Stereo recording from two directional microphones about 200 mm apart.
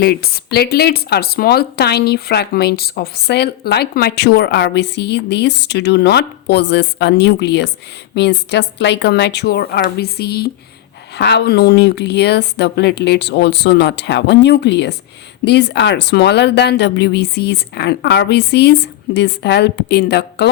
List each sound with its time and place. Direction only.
0.0 s speech: 50° left (ahead or behind)